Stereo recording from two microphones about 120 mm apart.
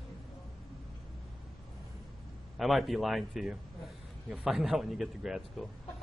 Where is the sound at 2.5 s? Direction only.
Centre (ahead or behind).